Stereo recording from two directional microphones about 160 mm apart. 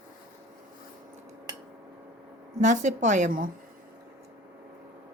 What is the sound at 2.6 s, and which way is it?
Speech, 50° right (ahead or behind).